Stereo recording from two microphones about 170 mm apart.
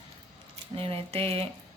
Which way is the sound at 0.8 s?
35° right (ahead or behind).